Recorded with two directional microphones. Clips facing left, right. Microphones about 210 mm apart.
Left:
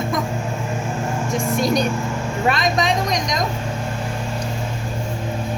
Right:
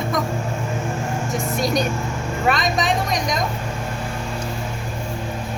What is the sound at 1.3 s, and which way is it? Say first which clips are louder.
A woman's voice: left 3 dB; centre (ahead or behind).